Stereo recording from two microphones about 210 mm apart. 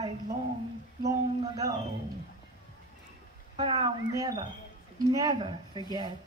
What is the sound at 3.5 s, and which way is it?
Speech, 25° right (ahead or behind).